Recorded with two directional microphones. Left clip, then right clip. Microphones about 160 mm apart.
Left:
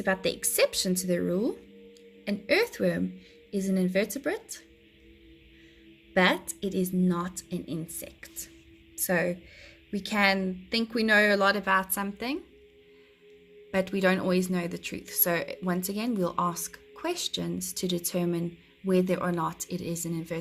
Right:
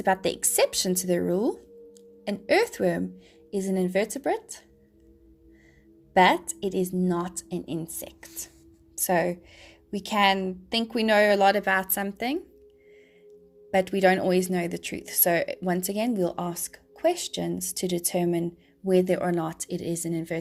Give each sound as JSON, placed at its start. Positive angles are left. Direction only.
{"t": 0.0, "sound": "speech", "side_deg": -20}
{"t": 6.1, "sound": "speech", "side_deg": -15}
{"t": 13.7, "sound": "speech", "side_deg": -15}